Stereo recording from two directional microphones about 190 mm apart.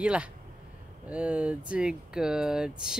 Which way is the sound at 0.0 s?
5° right (ahead or behind).